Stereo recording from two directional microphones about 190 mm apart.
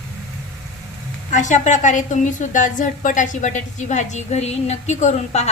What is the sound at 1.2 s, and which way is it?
A woman's voice, 40° left (ahead or behind).